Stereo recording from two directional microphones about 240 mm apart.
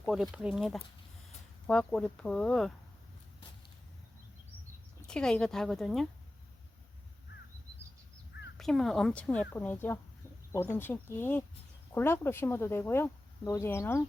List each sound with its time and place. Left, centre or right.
0.0 s a woman's voice: centre
5.0 s a woman's voice: centre
8.5 s a woman's voice: centre